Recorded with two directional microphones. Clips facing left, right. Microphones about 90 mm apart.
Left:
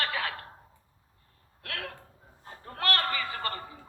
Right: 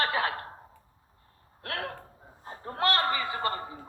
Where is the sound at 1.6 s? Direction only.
30° right (ahead or behind).